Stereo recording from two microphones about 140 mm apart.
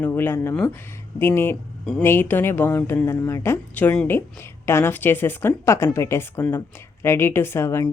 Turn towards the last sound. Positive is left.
turn(degrees=20)  # may be behind; listen again after turning